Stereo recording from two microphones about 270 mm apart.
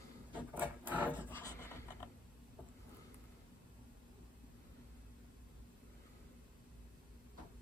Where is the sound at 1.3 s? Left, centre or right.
Centre.